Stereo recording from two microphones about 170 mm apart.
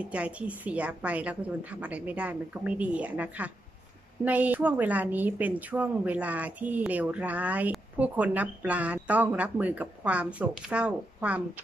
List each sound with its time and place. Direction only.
0.0 s a woman's voice: 5° right (ahead or behind)